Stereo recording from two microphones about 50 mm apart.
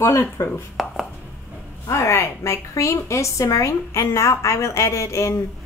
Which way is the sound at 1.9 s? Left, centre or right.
Left.